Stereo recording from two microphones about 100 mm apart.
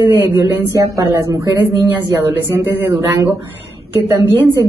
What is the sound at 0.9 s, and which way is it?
Speech, 25° right (ahead or behind).